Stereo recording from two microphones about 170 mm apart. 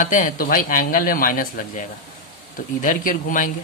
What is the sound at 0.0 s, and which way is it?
Speech, 50° left (ahead or behind).